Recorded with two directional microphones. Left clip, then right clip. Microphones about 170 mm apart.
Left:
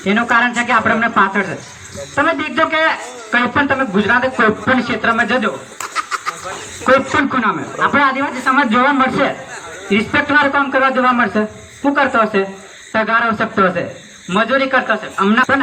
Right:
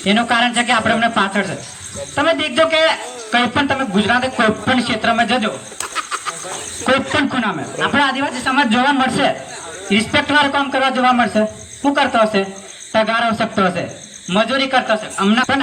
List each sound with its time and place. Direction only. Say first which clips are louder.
0.0 s speech: left 1 dB; 40° right (ahead or behind)